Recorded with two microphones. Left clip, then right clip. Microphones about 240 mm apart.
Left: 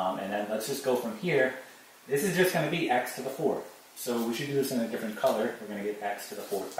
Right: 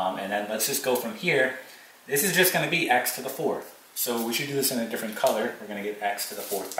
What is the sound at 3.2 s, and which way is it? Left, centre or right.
Speech, centre.